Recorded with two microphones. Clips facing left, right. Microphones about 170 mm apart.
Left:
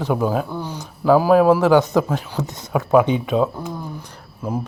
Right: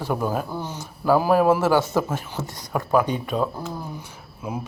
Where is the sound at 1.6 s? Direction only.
15° left (ahead or behind).